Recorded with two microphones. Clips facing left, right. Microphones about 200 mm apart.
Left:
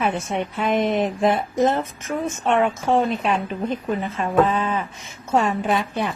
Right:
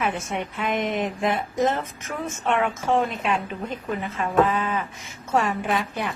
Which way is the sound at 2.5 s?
35° left (ahead or behind).